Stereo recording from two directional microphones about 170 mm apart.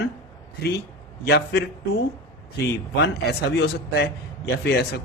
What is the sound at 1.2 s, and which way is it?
Speech, 75° left (ahead or behind).